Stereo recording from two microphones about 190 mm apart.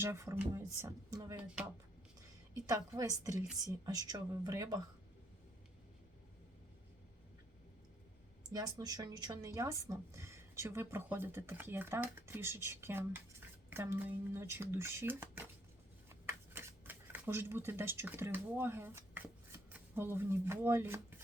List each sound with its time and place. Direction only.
0.0 s speech: 15° right (ahead or behind)
2.6 s a woman's voice: 20° right (ahead or behind)
8.5 s speech: 20° right (ahead or behind)
16.0 s a sound: 10° right (ahead or behind)
20.0 s speech: 10° right (ahead or behind)